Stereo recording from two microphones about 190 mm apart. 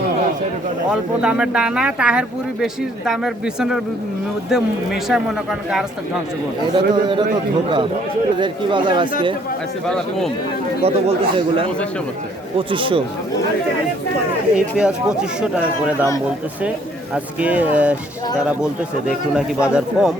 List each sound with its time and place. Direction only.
0.9 s speech: 5° right (ahead or behind)
6.7 s speech: 25° right (ahead or behind)
8.4 s speech: 25° right (ahead or behind)
9.8 s speech: 5° left (ahead or behind)
10.8 s a man's voice: 30° right (ahead or behind)
14.5 s speech: 5° right (ahead or behind)
17.4 s speech: 5° right (ahead or behind)